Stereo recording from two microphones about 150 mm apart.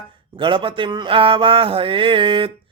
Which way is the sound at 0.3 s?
35° right (ahead or behind).